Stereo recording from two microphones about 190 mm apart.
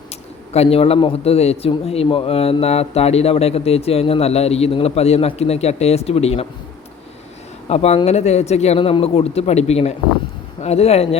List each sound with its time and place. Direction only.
0.5 s a man's voice: 30° left (ahead or behind)
7.7 s a man's voice: 35° left (ahead or behind)